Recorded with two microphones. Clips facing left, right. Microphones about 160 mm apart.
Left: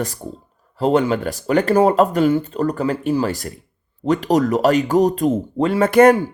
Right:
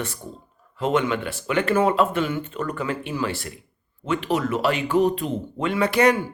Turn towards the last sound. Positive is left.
turn(degrees=50)  # may be behind; listen again after turning